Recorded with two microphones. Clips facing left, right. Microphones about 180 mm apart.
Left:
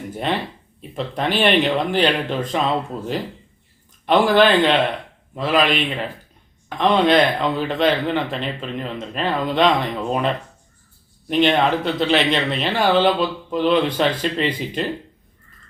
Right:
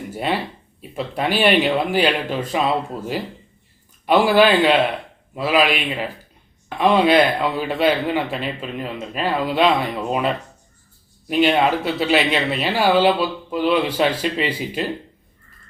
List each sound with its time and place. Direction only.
0.1 s a man's voice: 5° right (ahead or behind)